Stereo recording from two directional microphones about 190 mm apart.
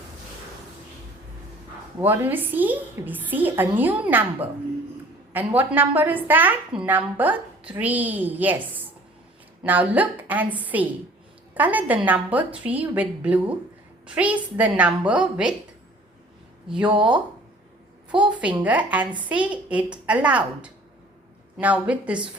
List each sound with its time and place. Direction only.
2.0 s a woman's voice: 10° right (ahead or behind)
16.8 s speech: 25° right (ahead or behind)
18.2 s a woman's voice: 5° right (ahead or behind)